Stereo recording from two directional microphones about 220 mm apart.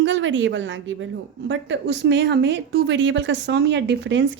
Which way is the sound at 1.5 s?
55° right (ahead or behind).